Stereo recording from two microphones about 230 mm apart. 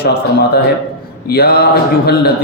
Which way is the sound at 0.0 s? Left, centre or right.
Left.